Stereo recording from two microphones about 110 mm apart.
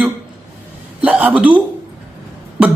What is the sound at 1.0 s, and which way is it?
Speech, 15° right (ahead or behind).